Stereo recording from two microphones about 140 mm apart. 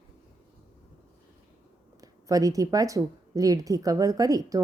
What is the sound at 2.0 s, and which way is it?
Speech, 25° right (ahead or behind).